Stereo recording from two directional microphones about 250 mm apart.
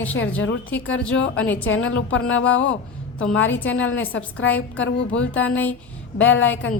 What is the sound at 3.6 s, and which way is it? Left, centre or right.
A woman's voice, left.